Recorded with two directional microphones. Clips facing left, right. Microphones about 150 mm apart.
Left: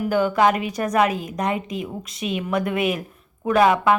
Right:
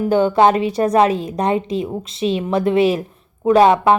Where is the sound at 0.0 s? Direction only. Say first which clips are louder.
Right 5 dB; 30° right (ahead or behind).